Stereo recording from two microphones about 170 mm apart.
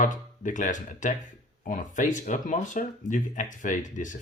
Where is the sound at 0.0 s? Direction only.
50° left (ahead or behind).